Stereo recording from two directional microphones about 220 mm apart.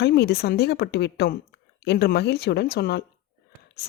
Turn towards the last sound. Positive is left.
turn(degrees=45)  # may be behind; listen again after turning